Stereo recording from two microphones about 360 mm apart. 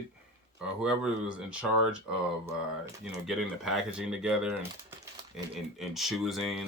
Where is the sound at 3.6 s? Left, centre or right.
Centre.